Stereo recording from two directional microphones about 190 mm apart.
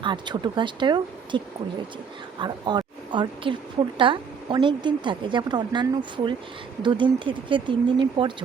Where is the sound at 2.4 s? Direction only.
25° right (ahead or behind).